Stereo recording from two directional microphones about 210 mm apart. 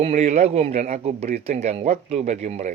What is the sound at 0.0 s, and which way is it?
A man's voice, 30° right (ahead or behind).